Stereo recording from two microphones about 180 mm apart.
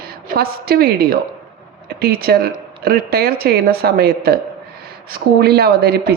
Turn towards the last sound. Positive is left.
turn(degrees=-60)  # may be behind; listen again after turning